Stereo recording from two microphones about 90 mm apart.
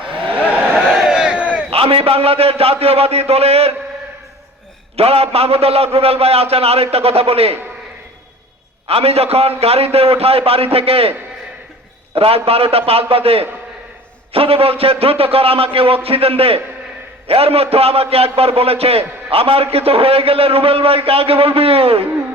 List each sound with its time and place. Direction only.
0.9 s crowd: 10° right (ahead or behind)
1.7 s a man's voice: 90° right
4.9 s a man's voice: 90° right
8.9 s a man's voice: 90° right
12.1 s a man's voice: 90° right